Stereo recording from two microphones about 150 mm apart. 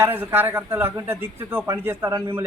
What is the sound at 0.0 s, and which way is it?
A man's voice, 15° right (ahead or behind).